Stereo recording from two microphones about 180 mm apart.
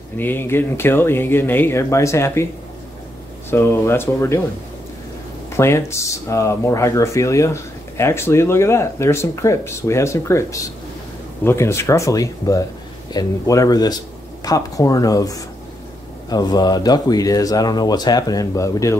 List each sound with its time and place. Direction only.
0.2 s speech: 10° left (ahead or behind)
3.4 s speech: 15° left (ahead or behind)
5.6 s speech: 15° left (ahead or behind)